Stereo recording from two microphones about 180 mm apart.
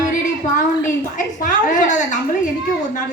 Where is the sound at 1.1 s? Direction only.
45° left (ahead or behind).